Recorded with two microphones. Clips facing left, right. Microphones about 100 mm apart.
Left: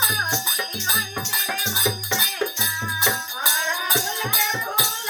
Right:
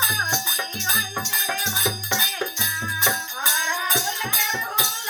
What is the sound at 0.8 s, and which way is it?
Music, 15° left (ahead or behind).